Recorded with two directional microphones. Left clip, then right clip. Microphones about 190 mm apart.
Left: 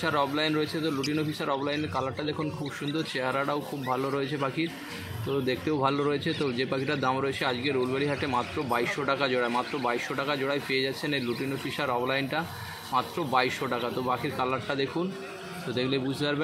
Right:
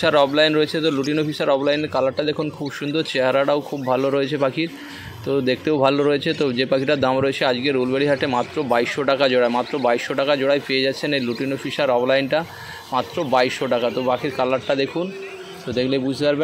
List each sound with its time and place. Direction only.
0.0 s speech: 45° right (ahead or behind)